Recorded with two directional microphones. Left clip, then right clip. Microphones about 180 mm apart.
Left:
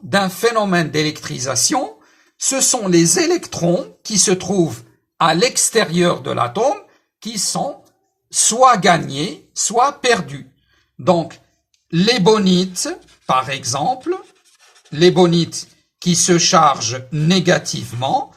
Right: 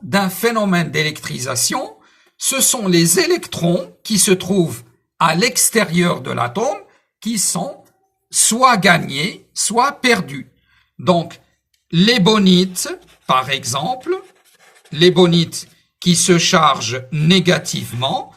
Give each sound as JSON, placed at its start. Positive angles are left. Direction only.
{"t": 0.1, "sound": "a woman's voice", "side_deg": 35}